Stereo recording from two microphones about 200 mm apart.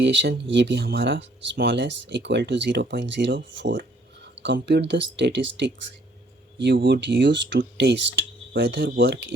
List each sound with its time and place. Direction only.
0.0 s speech: 60° right (ahead or behind)